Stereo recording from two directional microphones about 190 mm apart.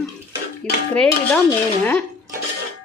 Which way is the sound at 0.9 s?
5° left (ahead or behind).